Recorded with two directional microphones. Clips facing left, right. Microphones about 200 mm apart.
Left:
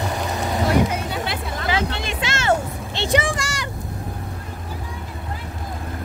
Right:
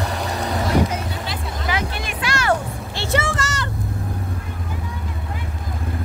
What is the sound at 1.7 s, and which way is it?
Vehicle, 25° left (ahead or behind).